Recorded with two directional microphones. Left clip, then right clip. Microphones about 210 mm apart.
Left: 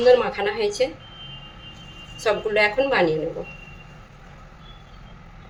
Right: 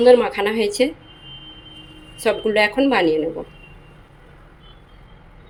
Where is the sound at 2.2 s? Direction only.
40° right (ahead or behind).